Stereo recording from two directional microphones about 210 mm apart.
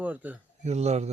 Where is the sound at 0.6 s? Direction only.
30° right (ahead or behind).